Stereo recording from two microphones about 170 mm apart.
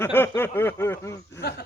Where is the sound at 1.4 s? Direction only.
70° left (ahead or behind).